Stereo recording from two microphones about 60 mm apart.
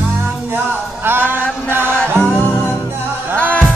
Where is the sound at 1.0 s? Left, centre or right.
Right.